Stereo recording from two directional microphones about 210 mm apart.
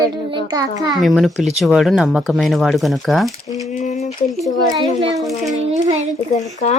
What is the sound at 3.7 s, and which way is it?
Speech, 35° left (ahead or behind).